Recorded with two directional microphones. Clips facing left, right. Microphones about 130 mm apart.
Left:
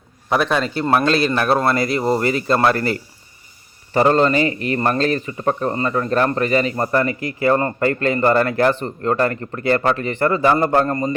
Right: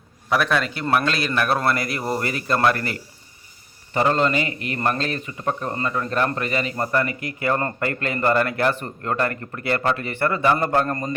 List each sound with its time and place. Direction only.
0.3 s a man's voice: 25° left (ahead or behind)